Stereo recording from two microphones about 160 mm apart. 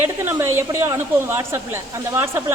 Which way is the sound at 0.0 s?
15° right (ahead or behind).